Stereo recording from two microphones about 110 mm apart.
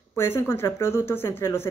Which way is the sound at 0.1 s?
20° left (ahead or behind).